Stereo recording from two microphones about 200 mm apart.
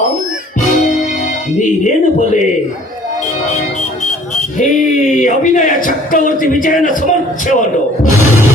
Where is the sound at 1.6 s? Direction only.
40° left (ahead or behind).